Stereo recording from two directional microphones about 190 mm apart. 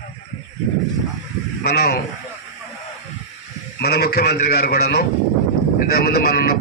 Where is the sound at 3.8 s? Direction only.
55° left (ahead or behind).